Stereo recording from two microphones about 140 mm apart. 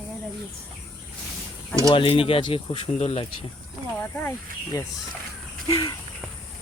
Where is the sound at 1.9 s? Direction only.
40° left (ahead or behind).